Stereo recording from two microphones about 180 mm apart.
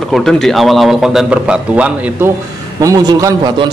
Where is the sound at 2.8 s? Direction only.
20° right (ahead or behind).